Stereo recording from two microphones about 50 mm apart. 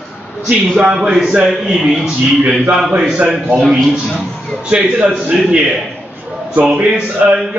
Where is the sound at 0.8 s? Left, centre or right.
Centre.